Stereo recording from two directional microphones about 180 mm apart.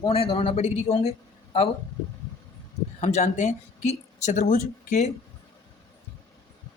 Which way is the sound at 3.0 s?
40° left (ahead or behind).